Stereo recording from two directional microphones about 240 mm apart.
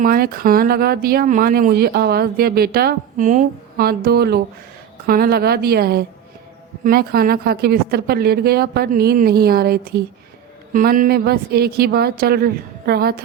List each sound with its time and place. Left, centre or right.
0.0 s speech: right